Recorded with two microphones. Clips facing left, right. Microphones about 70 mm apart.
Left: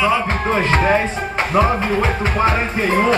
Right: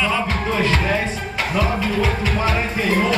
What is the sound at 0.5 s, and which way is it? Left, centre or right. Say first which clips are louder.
Music: left 5 dB; left.